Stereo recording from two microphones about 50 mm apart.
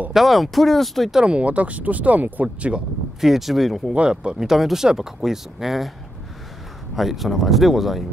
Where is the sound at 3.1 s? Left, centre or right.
Centre.